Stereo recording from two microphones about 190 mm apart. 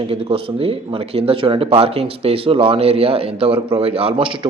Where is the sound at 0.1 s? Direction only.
30° right (ahead or behind).